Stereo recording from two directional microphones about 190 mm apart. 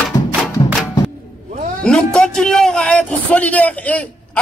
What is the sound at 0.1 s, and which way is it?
Music, 40° left (ahead or behind).